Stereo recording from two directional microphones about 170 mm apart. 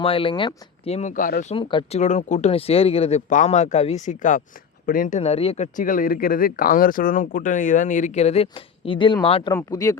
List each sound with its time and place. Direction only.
0.0 s speech: 30° left (ahead or behind); by 1.5 s 50° left (ahead or behind)
1.5 s speech: 30° left (ahead or behind)
2.0 s speech: 45° left (ahead or behind)
9.5 s speech: 20° left (ahead or behind)